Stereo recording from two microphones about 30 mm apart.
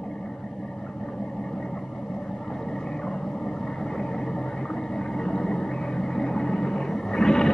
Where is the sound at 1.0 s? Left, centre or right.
Centre.